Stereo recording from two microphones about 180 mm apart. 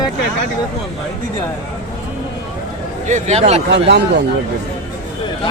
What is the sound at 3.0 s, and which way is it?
Speech, 40° right (ahead or behind).